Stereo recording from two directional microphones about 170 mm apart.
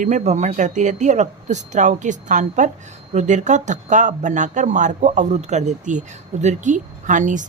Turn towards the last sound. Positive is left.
turn(degrees=-45)  # may be behind; listen again after turning